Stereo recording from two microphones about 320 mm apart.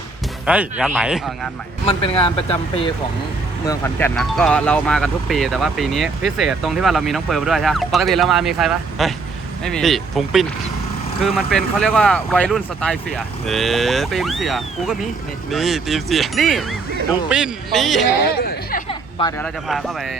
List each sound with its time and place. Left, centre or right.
0.4 s speech: centre
1.9 s speech: centre
3.7 s speech: centre
18.3 s speech: left
18.9 s a sound: centre
19.6 s speech: centre